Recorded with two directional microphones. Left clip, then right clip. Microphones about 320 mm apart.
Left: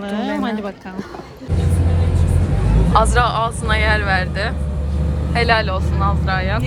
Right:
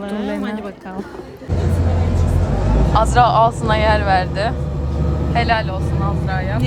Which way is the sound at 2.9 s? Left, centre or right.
Centre.